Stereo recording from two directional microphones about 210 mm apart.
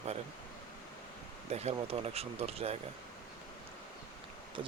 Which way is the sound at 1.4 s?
30° right (ahead or behind).